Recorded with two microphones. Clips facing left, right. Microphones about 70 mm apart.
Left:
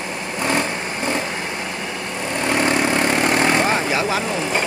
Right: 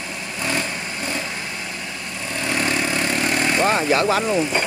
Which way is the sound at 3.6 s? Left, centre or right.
Centre.